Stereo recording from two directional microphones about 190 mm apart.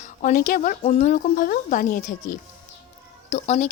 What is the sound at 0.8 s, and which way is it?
Speech, 35° left (ahead or behind).